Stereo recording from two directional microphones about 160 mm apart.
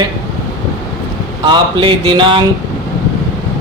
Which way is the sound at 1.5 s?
30° right (ahead or behind).